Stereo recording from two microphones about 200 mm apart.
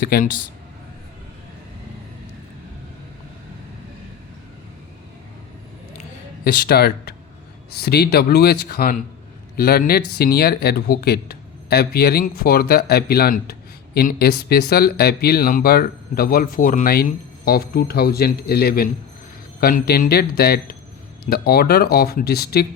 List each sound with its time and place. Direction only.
0.0 s speech: 45° left (ahead or behind)
6.4 s speech: 50° left (ahead or behind)